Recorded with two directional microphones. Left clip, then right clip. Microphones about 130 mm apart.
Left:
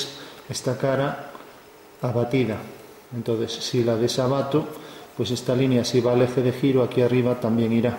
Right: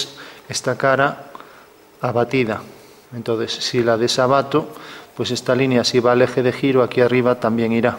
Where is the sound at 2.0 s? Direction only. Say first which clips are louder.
Right 5 dB; 5° left (ahead or behind).